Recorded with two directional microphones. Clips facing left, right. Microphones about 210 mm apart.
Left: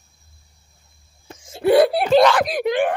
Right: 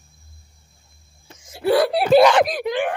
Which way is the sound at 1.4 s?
25° left (ahead or behind).